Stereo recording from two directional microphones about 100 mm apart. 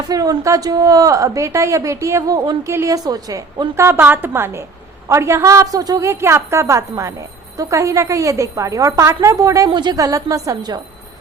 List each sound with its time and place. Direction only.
0.1 s a woman's voice: 35° right (ahead or behind)
9.6 s a woman's voice: 45° right (ahead or behind)